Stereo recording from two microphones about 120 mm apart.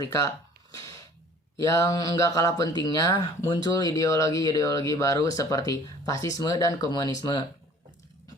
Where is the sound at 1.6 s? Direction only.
30° left (ahead or behind).